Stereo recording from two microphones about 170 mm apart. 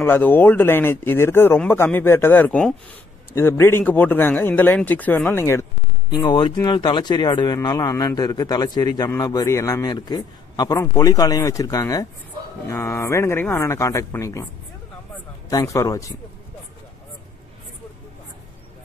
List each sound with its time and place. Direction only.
0.0 s speech: 10° left (ahead or behind)
15.5 s speech: 20° left (ahead or behind)